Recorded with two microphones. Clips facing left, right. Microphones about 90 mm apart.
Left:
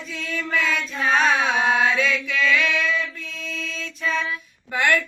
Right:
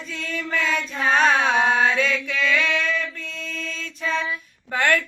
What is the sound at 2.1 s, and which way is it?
Male singing, 30° right (ahead or behind).